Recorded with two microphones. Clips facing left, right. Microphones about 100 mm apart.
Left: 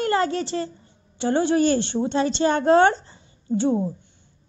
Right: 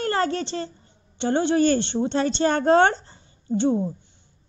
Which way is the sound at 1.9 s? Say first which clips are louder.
Even; 5° left (ahead or behind).